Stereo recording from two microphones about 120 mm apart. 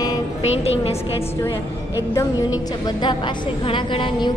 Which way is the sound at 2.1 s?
35° left (ahead or behind).